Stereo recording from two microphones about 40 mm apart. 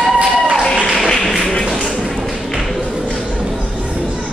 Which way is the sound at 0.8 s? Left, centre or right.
Centre.